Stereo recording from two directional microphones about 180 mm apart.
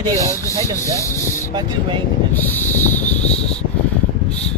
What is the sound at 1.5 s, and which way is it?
Speech, 25° right (ahead or behind).